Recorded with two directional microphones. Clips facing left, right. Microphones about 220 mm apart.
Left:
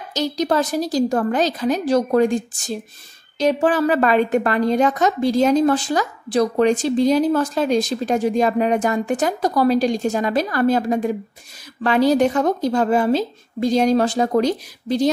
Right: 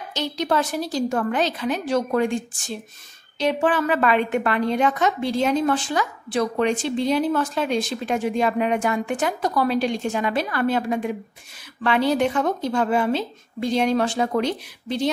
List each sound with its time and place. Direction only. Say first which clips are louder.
0.1 s a woman's voice: left 4 dB; 40° left (ahead or behind)